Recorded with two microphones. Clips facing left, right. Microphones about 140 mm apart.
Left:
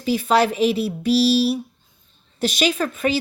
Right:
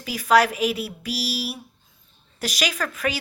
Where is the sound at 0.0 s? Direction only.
25° left (ahead or behind).